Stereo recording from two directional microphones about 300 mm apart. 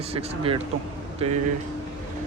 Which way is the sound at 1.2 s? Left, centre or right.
Centre.